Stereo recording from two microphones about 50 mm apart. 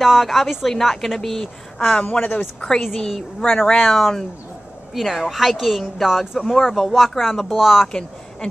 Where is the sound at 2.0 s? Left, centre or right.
Left.